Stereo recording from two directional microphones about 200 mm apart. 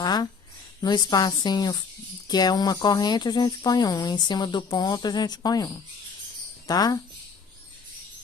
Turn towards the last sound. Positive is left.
turn(degrees=20)  # may be behind; listen again after turning